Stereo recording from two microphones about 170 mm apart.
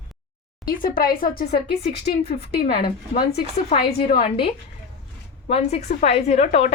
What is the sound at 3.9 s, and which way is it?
A woman's voice, 35° left (ahead or behind).